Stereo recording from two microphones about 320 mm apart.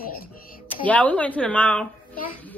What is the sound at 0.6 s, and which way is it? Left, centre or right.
Speech, centre.